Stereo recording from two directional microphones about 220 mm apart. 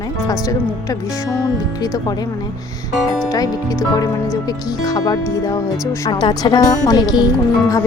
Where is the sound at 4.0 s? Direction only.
15° left (ahead or behind).